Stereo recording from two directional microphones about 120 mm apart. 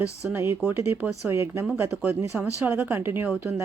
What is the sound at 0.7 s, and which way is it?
Speech, 15° right (ahead or behind).